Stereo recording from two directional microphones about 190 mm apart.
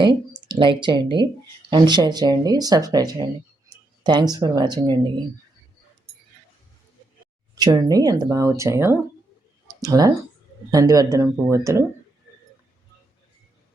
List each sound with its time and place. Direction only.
0.0 s speech: 25° right (ahead or behind)
7.5 s speech: 20° right (ahead or behind)